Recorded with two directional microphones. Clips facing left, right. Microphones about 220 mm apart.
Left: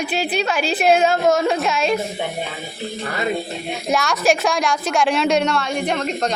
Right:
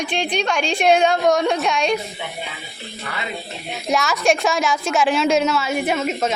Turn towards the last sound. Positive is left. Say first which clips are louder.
# right 1 dB
turn(degrees=-5)  # may be behind; listen again after turning